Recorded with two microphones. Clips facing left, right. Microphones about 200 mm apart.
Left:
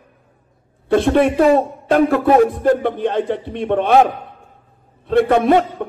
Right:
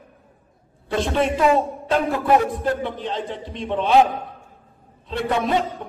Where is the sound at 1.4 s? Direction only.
55° left (ahead or behind).